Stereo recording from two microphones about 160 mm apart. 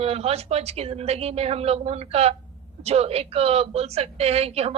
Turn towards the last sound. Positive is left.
turn(degrees=-40)  # may be behind; listen again after turning